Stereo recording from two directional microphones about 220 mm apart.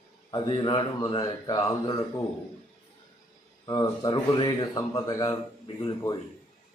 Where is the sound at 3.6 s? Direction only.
15° left (ahead or behind).